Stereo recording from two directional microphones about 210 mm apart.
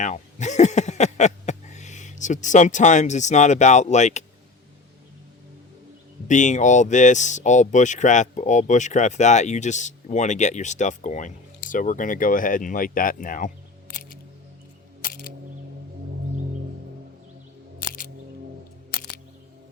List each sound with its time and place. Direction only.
0.0 s speech: 35° left (ahead or behind)
6.2 s speech: 35° left (ahead or behind)
17.7 s music: 40° left (ahead or behind)